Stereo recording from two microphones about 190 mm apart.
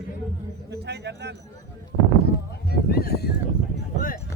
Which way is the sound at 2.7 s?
55° left (ahead or behind).